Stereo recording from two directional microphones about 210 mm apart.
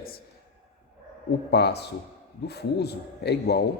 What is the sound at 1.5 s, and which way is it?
A man's voice, 50° left (ahead or behind).